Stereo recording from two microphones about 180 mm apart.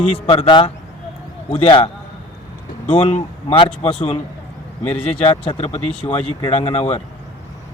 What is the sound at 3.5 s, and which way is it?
Speech, 30° left (ahead or behind).